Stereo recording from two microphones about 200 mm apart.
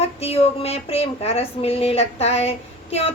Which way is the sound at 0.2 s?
30° left (ahead or behind).